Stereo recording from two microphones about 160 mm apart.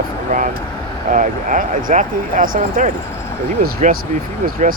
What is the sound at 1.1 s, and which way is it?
Speech, 55° right (ahead or behind).